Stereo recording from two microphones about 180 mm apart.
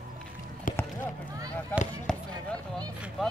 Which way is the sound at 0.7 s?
50° left (ahead or behind).